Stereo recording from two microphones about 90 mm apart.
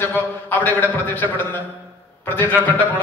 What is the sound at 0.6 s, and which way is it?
Speech, 20° left (ahead or behind).